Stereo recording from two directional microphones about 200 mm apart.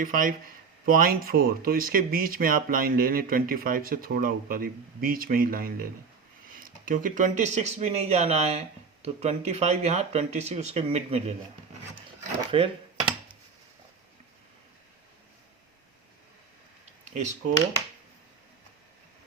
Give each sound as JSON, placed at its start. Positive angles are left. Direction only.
{"t": 0.0, "sound": "speech", "side_deg": -45}
{"t": 12.5, "sound": "dishes", "side_deg": -25}